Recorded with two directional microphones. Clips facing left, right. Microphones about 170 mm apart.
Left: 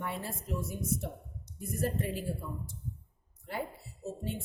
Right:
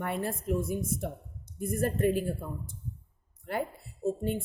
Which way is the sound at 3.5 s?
55° right (ahead or behind).